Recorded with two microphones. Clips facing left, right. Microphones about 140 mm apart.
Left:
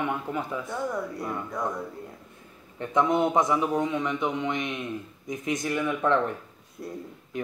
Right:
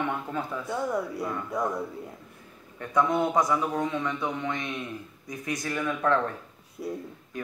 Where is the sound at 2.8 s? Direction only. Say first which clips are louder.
Left 2 dB; 20° left (ahead or behind).